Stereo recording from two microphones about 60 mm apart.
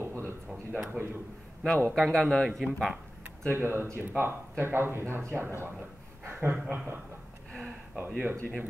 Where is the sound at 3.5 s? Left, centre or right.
Right.